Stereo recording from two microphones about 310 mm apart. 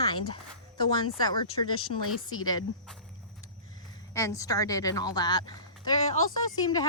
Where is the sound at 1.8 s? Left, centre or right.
Left.